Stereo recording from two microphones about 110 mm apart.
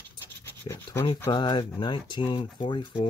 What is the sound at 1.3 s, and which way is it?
Speech, 45° left (ahead or behind).